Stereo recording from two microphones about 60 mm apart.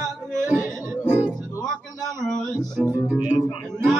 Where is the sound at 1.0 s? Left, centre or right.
Right.